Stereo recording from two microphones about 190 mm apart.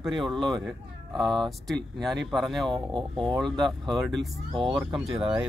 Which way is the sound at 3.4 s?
Centre (ahead or behind).